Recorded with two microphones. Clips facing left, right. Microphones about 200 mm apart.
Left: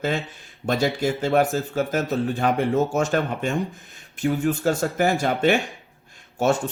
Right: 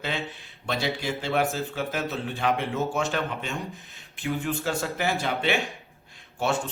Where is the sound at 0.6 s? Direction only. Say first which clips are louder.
Left 7 dB; 45° left (ahead or behind).